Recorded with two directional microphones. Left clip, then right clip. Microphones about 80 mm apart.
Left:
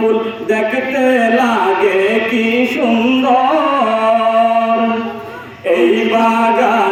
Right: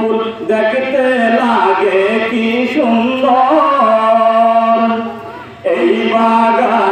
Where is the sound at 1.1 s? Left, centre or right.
Right.